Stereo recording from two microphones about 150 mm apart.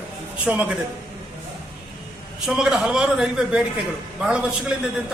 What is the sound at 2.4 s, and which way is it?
A man's voice, 5° right (ahead or behind).